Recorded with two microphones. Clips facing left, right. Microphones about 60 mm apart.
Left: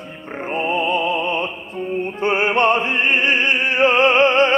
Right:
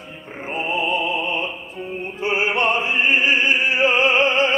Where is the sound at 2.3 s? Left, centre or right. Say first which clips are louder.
Left 2 dB; left.